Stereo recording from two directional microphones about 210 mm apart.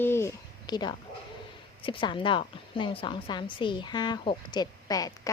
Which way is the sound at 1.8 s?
25° left (ahead or behind).